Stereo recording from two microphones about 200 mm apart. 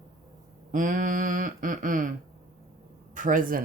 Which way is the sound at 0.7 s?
40° right (ahead or behind).